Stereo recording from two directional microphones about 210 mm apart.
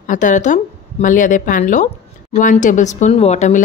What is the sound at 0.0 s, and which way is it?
A woman's voice, 35° left (ahead or behind).